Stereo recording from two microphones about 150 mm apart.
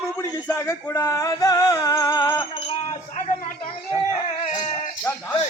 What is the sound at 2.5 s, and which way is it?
Speech, 40° left (ahead or behind).